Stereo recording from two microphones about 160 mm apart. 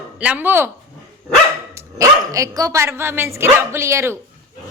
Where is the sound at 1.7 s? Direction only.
20° right (ahead or behind).